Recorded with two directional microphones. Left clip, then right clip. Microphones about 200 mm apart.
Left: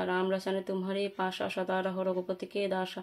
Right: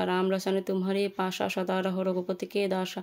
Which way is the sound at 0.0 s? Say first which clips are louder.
Right 3 dB; 35° right (ahead or behind).